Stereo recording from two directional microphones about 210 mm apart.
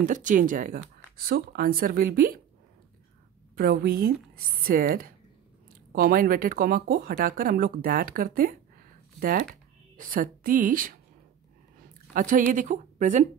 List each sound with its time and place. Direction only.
0.0 s speech: 35° right (ahead or behind)
3.5 s speech: 45° right (ahead or behind)
12.1 s speech: 40° right (ahead or behind)